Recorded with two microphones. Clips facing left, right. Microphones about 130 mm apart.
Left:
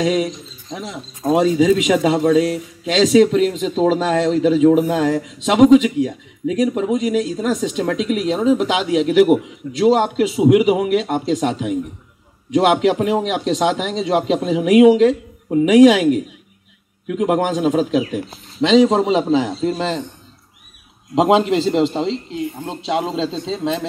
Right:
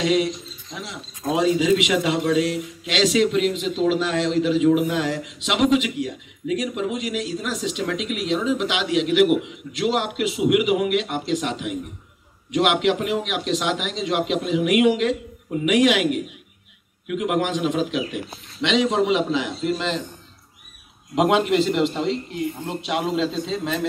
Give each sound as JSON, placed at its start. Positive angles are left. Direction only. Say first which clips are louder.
{"t": 0.0, "sound": "speech", "louder": "left 2 dB", "side_deg": 40}
{"t": 21.1, "sound": "speech", "louder": "left 4 dB", "side_deg": 30}